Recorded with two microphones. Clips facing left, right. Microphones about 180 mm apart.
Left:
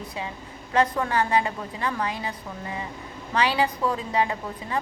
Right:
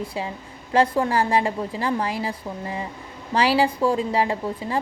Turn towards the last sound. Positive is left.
turn(degrees=-30)  # may be behind; listen again after turning